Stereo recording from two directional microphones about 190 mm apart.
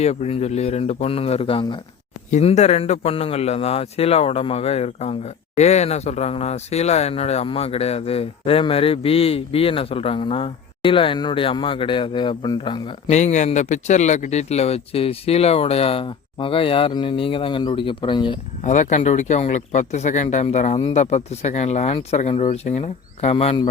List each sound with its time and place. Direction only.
0.0 s a man's voice: 35° left (ahead or behind)
13.1 s a man's voice: 40° left (ahead or behind)
18.6 s a man's voice: 40° left (ahead or behind)